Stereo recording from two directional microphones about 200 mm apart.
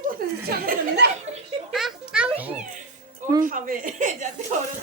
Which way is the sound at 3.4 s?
40° right (ahead or behind).